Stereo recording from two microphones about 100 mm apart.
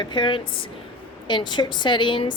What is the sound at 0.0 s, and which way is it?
A woman's voice, 50° left (ahead or behind).